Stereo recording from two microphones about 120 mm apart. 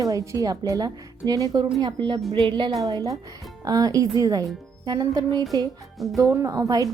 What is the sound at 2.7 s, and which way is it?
A woman's voice, 30° right (ahead or behind).